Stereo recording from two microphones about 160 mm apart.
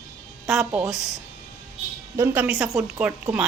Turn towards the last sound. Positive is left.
turn(degrees=-5)  # may be behind; listen again after turning